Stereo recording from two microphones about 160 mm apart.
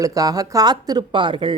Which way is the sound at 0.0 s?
20° right (ahead or behind).